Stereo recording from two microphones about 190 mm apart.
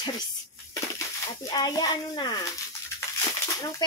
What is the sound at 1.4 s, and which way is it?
Speech, 20° left (ahead or behind).